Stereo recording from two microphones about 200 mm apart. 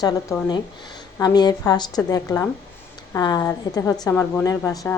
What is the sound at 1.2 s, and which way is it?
A woman's voice, 20° left (ahead or behind).